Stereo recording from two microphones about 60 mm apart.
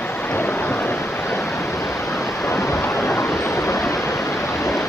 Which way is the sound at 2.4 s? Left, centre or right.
Left.